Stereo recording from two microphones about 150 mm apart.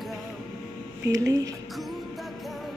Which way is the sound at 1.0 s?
20° right (ahead or behind).